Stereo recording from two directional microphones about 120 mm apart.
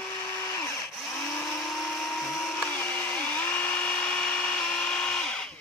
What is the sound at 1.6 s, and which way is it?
Blender, centre (ahead or behind).